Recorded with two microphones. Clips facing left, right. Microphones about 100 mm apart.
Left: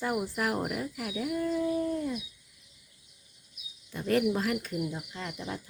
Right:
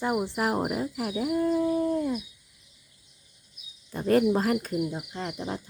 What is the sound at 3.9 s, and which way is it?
Speech, 35° right (ahead or behind).